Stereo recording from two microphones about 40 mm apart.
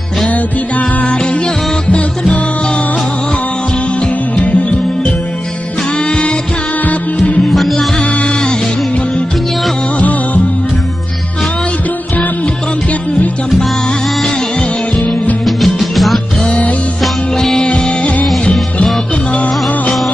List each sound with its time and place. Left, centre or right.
0.3 s music: left
9.9 s music of bollywood: left
15.4 s music: centre
16.4 s music: left
17.0 s music: centre
17.6 s music: left